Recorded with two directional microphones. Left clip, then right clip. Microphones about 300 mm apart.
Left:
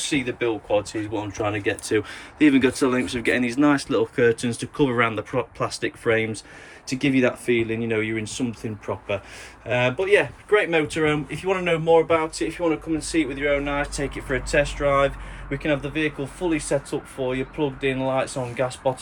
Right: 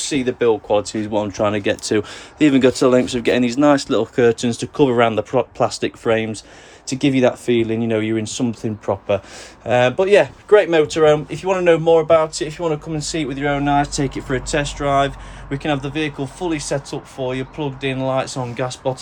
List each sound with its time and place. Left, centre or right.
0.0 s speech: centre